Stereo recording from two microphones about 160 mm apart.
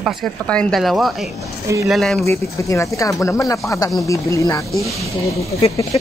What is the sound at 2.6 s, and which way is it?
Speech, 20° left (ahead or behind).